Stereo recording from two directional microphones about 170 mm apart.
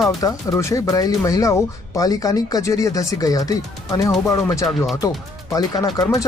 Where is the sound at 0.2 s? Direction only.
20° left (ahead or behind).